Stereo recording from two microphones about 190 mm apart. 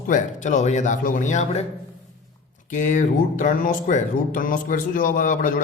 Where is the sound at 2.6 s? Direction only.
40° left (ahead or behind).